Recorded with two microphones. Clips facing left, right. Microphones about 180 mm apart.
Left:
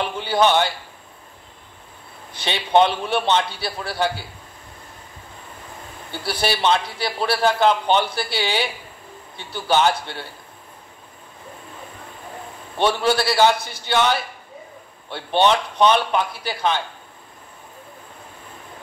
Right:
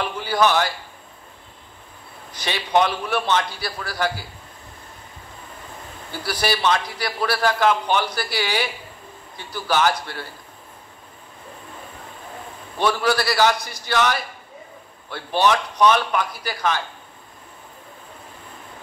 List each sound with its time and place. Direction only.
0.0 s a man's voice: 25° left (ahead or behind)
2.3 s a man's voice: 25° left (ahead or behind)
6.1 s a man's voice: 25° left (ahead or behind)
12.7 s a man's voice: 25° left (ahead or behind)